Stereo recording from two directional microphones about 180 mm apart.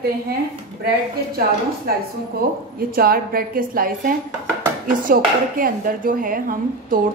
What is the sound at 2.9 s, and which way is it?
Speech, 55° right (ahead or behind).